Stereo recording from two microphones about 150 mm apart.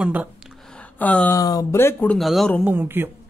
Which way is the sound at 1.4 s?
25° left (ahead or behind).